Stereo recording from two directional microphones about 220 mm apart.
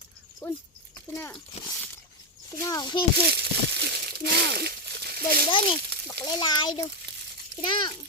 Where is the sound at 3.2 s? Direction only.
50° right (ahead or behind).